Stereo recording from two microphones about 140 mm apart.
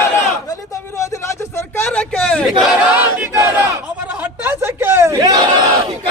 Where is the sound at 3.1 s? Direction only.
15° right (ahead or behind).